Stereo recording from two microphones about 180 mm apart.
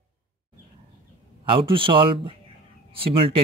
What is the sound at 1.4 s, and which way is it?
Speech, 30° right (ahead or behind).